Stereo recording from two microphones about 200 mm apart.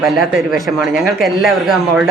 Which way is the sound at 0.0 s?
Centre (ahead or behind).